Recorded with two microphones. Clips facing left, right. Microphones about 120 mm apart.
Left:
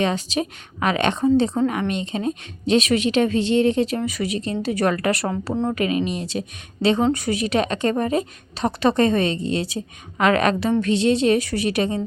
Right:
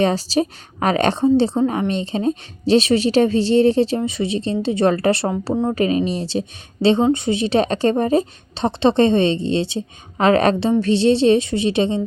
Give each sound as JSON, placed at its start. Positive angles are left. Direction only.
{"t": 0.0, "sound": "a woman's voice", "side_deg": -35}